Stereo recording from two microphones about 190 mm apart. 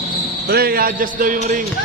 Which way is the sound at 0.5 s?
55° right (ahead or behind).